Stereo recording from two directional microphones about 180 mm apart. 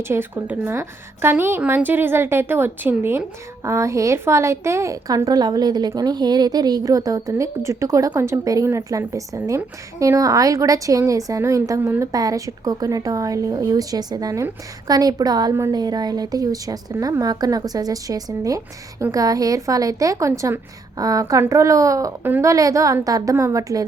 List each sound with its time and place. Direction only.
0.1 s a woman's voice: 10° right (ahead or behind)